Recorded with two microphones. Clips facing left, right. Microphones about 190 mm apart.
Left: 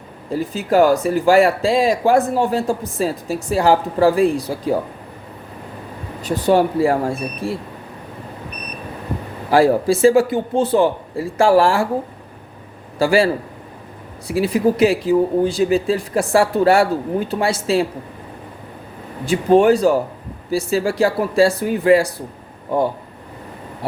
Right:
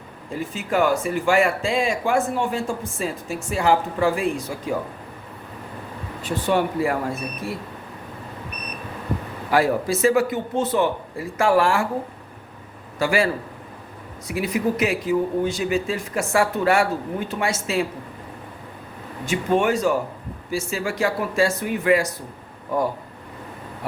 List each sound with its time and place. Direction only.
0.3 s speech: 35° left (ahead or behind)
6.2 s speech: 40° left (ahead or behind)
9.5 s speech: 30° left (ahead or behind)
13.0 s speech: 30° left (ahead or behind)
19.2 s speech: 35° left (ahead or behind)